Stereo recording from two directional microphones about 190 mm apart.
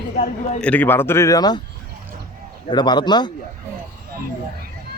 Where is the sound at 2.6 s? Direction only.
25° left (ahead or behind).